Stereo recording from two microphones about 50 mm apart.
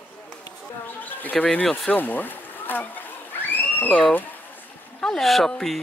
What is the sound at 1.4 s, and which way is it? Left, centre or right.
Speech, left.